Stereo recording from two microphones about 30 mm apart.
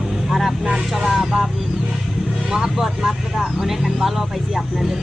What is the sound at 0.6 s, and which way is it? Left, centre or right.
Vehicle, right.